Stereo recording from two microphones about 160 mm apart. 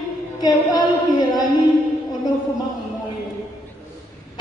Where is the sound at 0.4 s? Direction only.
25° left (ahead or behind).